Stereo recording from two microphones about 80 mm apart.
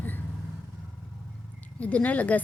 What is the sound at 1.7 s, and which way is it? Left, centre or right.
Speech, centre.